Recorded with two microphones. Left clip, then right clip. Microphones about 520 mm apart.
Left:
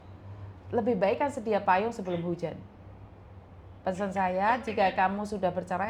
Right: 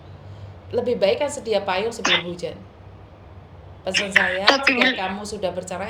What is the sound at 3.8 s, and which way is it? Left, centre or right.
A woman's voice, left.